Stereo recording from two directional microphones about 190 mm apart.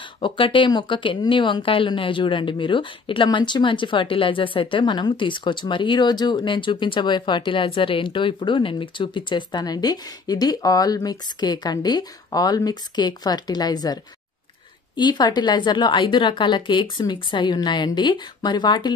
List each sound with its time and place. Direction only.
0.2 s a woman's voice: 25° left (ahead or behind)
15.0 s a woman's voice: 25° left (ahead or behind)